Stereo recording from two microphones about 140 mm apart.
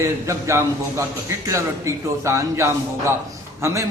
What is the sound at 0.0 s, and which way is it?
Speech, 20° right (ahead or behind).